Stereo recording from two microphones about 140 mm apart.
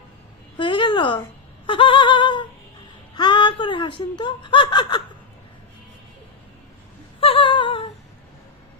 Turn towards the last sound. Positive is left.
turn(degrees=35)  # may be behind; listen again after turning